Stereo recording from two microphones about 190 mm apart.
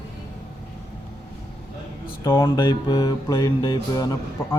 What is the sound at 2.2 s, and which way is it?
Music, 20° left (ahead or behind).